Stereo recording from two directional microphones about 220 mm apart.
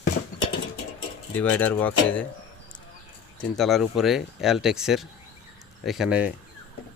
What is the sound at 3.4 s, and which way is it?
Speech, centre (ahead or behind).